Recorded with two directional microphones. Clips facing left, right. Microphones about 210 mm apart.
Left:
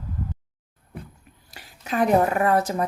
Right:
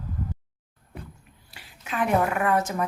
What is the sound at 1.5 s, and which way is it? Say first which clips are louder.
A woman's voice: left 5 dB; 40° left (ahead or behind).